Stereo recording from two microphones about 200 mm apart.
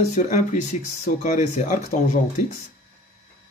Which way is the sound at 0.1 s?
35° left (ahead or behind).